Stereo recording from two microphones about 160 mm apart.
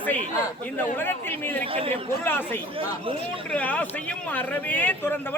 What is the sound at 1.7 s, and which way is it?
Speech, 35° right (ahead or behind).